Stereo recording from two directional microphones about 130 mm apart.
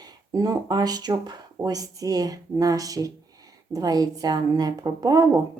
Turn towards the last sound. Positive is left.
turn(degrees=-30)  # may be behind; listen again after turning